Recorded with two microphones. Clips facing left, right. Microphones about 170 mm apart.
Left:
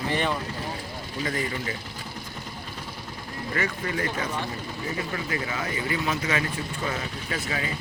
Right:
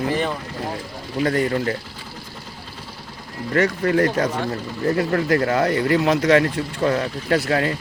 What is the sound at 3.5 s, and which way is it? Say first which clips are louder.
Speech: right 11 dB; 60° right (ahead or behind).